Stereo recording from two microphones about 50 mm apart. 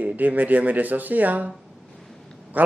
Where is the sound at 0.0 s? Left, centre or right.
Right.